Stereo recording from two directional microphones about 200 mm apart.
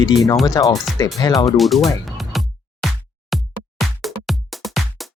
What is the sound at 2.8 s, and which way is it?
Music, centre (ahead or behind).